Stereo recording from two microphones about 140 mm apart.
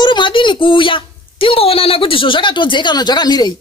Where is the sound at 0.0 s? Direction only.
35° left (ahead or behind).